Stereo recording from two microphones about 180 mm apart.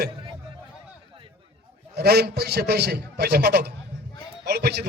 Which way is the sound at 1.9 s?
60° right (ahead or behind).